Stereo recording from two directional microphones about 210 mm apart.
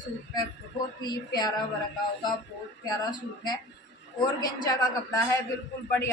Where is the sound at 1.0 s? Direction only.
20° left (ahead or behind).